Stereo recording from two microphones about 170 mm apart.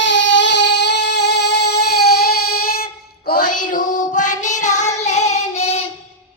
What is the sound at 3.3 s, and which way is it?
Child singing, 50° left (ahead or behind).